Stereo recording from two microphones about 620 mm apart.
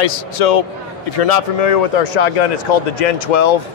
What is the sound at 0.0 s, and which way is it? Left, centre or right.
Speech, left.